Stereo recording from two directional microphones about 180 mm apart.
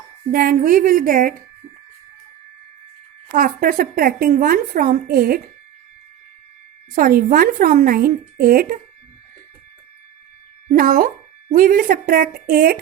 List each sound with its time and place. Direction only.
0.3 s a woman's voice: 55° right (ahead or behind)
3.3 s a woman's voice: 50° right (ahead or behind)
6.9 s a woman's voice: 50° right (ahead or behind)
10.7 s speech: 50° right (ahead or behind)